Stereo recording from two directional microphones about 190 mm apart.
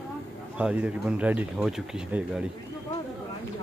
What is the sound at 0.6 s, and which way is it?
Speech, 5° right (ahead or behind).